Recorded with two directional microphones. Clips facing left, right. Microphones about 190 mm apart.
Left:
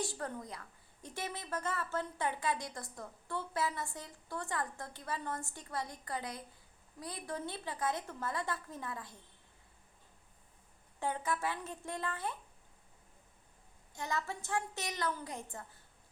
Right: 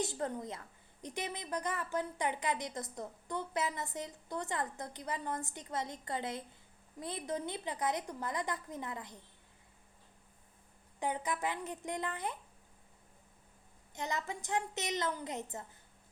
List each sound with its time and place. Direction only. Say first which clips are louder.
0.0 s a woman's voice: right 3 dB; 20° right (ahead or behind)
11.0 s a woman's voice: even; 15° right (ahead or behind)
13.9 s a woman's voice: even; 20° right (ahead or behind)